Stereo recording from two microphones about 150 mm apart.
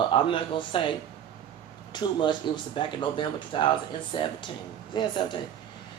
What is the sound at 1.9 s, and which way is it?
Speech, 30° left (ahead or behind).